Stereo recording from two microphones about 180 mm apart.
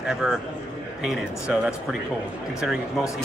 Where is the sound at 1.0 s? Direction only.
5° right (ahead or behind).